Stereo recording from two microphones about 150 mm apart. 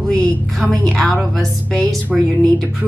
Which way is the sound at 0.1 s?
5° left (ahead or behind).